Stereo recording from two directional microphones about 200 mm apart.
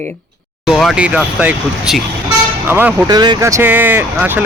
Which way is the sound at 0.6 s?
Centre (ahead or behind).